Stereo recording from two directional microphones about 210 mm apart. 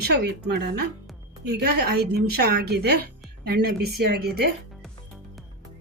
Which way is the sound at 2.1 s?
50° right (ahead or behind).